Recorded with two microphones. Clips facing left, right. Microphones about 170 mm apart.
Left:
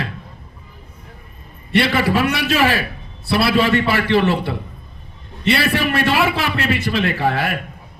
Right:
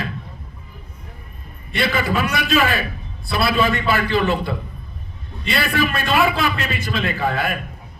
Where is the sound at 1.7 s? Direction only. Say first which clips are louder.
Left 4 dB; 70° left (ahead or behind).